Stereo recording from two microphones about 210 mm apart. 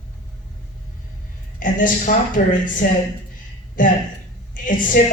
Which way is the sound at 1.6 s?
40° left (ahead or behind).